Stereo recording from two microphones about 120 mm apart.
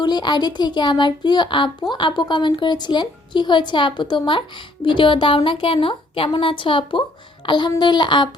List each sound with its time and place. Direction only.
0.0 s a woman's voice: 35° left (ahead or behind)
7.4 s babbling: 40° left (ahead or behind)
7.8 s speech: 40° left (ahead or behind)